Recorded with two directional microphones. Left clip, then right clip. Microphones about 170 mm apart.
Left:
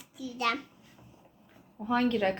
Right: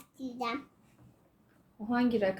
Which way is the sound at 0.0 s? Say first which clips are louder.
Left 6 dB; 25° right (ahead or behind).